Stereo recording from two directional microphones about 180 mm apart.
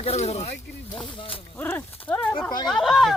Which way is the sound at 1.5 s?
10° left (ahead or behind).